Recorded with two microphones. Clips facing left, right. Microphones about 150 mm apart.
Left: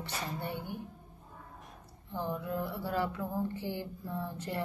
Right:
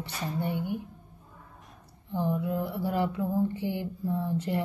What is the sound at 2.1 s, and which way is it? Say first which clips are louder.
Speech: right 6 dB; 15° right (ahead or behind).